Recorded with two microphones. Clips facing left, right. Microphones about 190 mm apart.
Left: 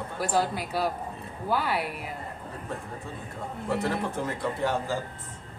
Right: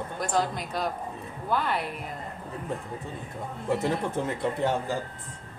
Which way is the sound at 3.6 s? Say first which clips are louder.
Right 2 dB; 20° right (ahead or behind).